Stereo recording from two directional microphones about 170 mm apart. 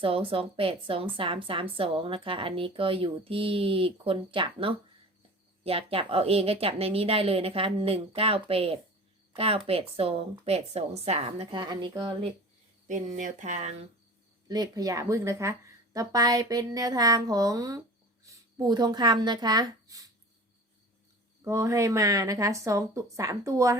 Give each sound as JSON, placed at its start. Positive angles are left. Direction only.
{"t": 0.0, "sound": "a woman's voice", "side_deg": -30}
{"t": 12.9, "sound": "speech", "side_deg": -45}
{"t": 14.4, "sound": "a woman's voice", "side_deg": -25}
{"t": 21.4, "sound": "a woman's voice", "side_deg": -15}